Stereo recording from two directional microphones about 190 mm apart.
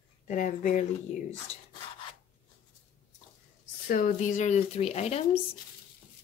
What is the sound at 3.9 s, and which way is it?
Speech, 45° left (ahead or behind).